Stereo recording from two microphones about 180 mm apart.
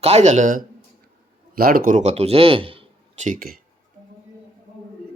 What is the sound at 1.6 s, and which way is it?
Speech, 55° right (ahead or behind).